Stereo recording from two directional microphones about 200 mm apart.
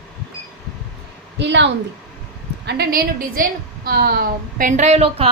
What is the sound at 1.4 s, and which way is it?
A woman's voice, 60° right (ahead or behind).